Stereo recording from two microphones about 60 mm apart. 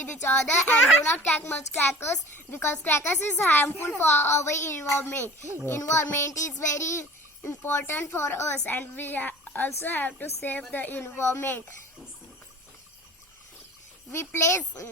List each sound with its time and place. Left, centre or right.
0.0 s a woman's voice: left
1.9 s a woman's voice: left
5.6 s a child's voice: left
7.4 s speech: left
8.5 s a woman's voice: left
11.0 s speech: left
14.1 s speech: left